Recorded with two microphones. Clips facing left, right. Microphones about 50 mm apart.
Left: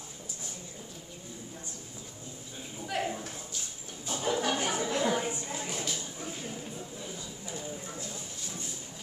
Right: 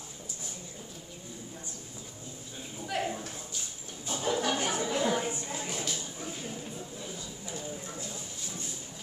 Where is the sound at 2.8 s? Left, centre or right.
Centre.